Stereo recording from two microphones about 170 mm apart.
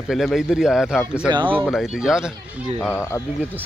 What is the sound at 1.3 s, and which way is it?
Speech, 30° right (ahead or behind).